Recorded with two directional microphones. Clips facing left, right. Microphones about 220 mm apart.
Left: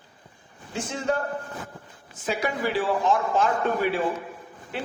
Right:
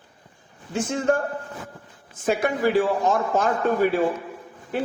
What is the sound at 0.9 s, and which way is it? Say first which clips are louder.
Speech: right 4 dB; 50° right (ahead or behind).